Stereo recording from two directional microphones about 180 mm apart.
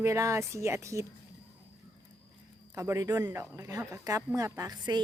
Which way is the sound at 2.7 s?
15° right (ahead or behind).